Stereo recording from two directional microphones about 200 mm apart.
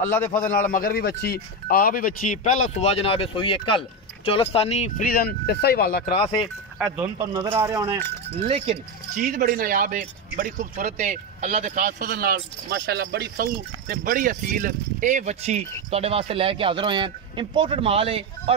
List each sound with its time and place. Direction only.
0.5 s speech: 45° left (ahead or behind)
6.0 s speech: 30° left (ahead or behind)
6.4 s speech: 5° right (ahead or behind)
8.4 s speech: 25° right (ahead or behind)
9.1 s speech: 40° right (ahead or behind)